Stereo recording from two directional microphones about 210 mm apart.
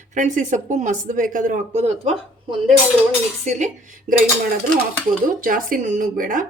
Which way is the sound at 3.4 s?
35° right (ahead or behind).